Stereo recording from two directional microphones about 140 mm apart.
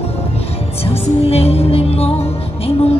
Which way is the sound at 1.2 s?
45° left (ahead or behind).